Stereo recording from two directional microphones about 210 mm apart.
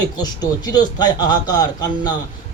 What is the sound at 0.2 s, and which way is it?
Speech, 20° left (ahead or behind).